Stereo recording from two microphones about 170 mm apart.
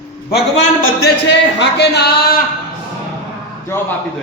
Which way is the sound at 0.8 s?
65° left (ahead or behind).